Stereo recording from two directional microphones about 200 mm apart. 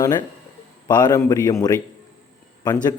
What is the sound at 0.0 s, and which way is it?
A man's voice, 20° left (ahead or behind).